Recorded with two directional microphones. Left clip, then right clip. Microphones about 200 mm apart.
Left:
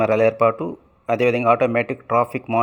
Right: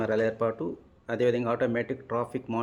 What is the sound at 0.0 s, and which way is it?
A man's voice, 20° left (ahead or behind).